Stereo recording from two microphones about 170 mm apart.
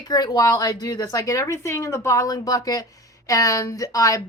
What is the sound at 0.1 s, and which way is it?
Speech, 20° left (ahead or behind).